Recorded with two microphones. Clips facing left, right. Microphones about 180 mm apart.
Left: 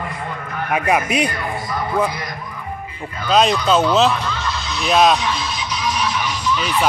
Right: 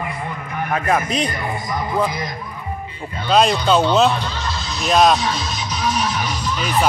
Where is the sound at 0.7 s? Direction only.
10° left (ahead or behind).